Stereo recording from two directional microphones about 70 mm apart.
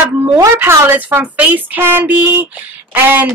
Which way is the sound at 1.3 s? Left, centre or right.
Right.